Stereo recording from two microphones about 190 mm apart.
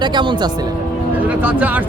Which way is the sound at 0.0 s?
25° right (ahead or behind).